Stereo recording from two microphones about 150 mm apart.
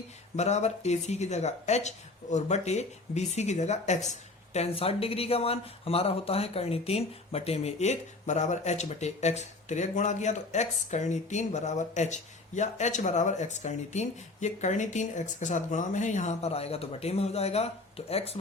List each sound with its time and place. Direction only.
0.3 s speech: 50° left (ahead or behind)